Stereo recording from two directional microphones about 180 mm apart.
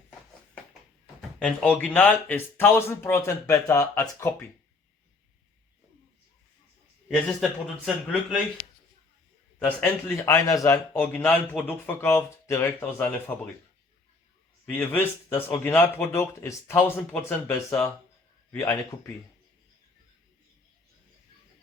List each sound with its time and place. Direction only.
1.4 s a man's voice: 5° left (ahead or behind)
7.9 s speech: centre (ahead or behind)
9.6 s a man's voice: 10° left (ahead or behind)
14.7 s a man's voice: 10° left (ahead or behind)